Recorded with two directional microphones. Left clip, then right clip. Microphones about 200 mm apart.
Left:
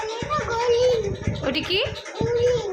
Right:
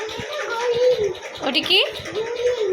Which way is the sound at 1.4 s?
10° left (ahead or behind).